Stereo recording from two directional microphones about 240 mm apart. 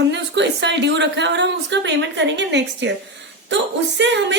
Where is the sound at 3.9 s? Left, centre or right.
Right.